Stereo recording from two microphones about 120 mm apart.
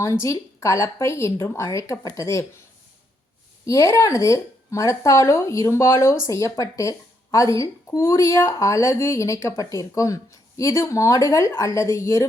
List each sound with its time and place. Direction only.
0.0 s speech: 25° left (ahead or behind)
3.7 s speech: 25° left (ahead or behind)